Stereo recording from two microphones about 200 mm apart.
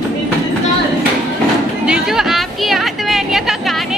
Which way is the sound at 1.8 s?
5° right (ahead or behind).